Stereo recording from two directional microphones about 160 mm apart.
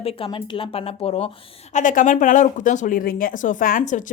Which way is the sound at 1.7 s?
55° left (ahead or behind).